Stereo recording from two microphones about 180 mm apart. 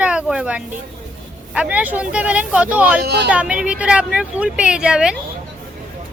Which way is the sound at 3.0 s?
65° right (ahead or behind).